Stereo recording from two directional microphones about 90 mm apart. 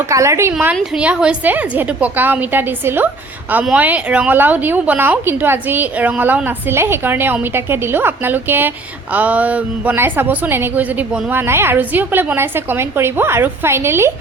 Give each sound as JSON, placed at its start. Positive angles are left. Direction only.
{"t": 0.1, "sound": "a woman's voice", "side_deg": -35}
{"t": 0.6, "sound": "a woman's voice", "side_deg": -15}